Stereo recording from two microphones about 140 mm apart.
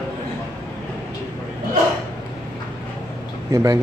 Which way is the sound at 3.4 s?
25° right (ahead or behind).